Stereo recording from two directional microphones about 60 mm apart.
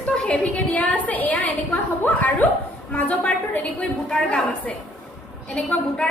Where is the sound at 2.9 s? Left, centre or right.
Left.